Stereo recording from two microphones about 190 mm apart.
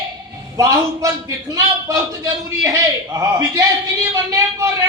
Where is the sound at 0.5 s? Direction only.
15° right (ahead or behind).